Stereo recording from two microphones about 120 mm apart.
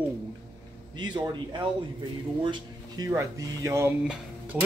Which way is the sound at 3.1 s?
25° right (ahead or behind).